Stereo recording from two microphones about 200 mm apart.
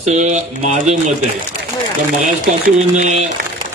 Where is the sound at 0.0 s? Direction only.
35° right (ahead or behind).